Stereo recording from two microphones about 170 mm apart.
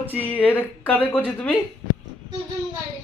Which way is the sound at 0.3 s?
10° left (ahead or behind).